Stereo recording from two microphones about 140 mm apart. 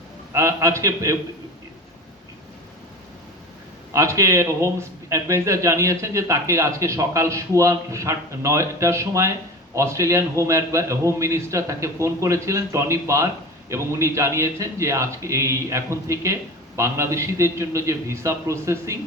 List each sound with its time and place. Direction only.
0.3 s speech: 20° right (ahead or behind)
3.9 s speech: 20° right (ahead or behind)